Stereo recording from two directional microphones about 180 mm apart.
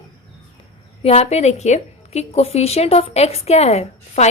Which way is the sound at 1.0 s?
35° left (ahead or behind).